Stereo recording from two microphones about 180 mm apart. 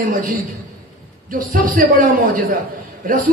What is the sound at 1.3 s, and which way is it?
Speech, 50° right (ahead or behind).